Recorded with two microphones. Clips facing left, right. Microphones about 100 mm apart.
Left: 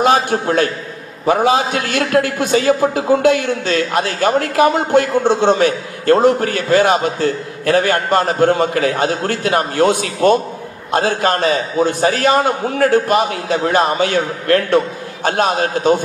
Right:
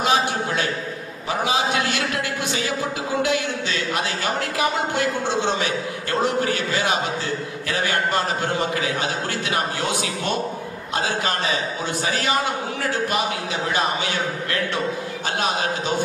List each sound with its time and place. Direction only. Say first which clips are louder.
0.0 s a man's voice: left 7 dB; 50° left (ahead or behind)